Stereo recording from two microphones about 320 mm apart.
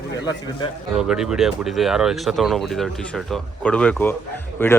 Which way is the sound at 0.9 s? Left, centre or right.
Centre.